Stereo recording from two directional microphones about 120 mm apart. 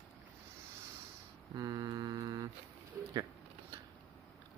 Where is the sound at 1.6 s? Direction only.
30° right (ahead or behind).